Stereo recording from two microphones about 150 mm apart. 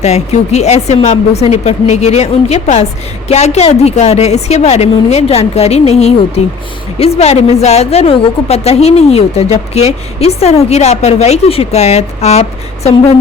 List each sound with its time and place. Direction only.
0.0 s a woman's voice: 45° left (ahead or behind)